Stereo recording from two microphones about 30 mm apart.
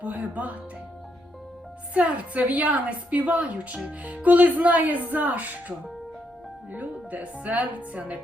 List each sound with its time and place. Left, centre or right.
0.0 s speech: right
1.9 s a woman's voice: right
6.7 s speech: right